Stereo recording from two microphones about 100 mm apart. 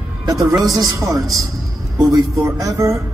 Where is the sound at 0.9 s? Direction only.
30° right (ahead or behind).